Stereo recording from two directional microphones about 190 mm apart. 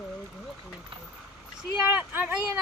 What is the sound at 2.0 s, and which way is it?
Speech, 10° right (ahead or behind).